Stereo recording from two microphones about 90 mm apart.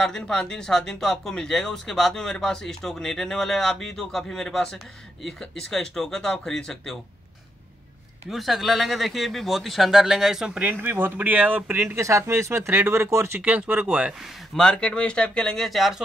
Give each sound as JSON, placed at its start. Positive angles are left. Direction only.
{"t": 0.0, "sound": "speech", "side_deg": 5}
{"t": 8.3, "sound": "speech", "side_deg": 0}
{"t": 10.7, "sound": "speech", "side_deg": -20}
{"t": 13.4, "sound": "speech", "side_deg": -15}
{"t": 14.5, "sound": "speech", "side_deg": 10}